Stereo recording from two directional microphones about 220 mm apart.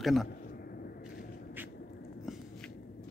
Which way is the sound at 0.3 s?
45° left (ahead or behind).